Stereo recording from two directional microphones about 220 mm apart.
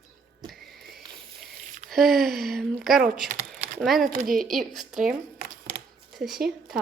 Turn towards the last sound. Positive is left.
turn(degrees=0)  # may be behind; listen again after turning